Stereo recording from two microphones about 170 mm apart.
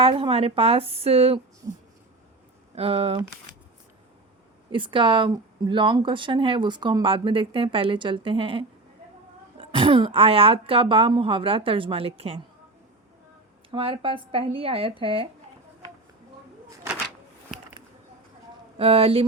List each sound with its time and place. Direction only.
0.0 s speech: 35° right (ahead or behind)
2.7 s speech: 35° right (ahead or behind)
4.7 s speech: 30° right (ahead or behind)
13.7 s speech: 30° right (ahead or behind)
18.8 s speech: 35° right (ahead or behind)